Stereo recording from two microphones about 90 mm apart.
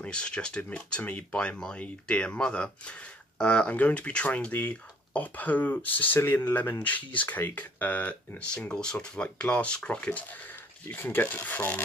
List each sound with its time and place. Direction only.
0.0 s speech: 10° left (ahead or behind)